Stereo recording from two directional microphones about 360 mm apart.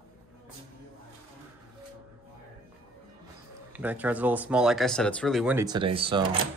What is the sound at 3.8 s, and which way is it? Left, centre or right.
Speech, centre.